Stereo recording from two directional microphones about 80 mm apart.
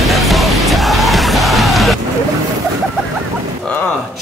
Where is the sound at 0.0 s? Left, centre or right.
Centre.